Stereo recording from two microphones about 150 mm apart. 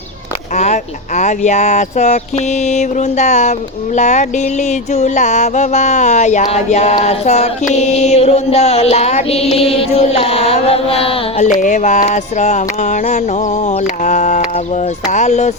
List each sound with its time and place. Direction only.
0.5 s music: 50° left (ahead or behind)
11.4 s music: 60° left (ahead or behind)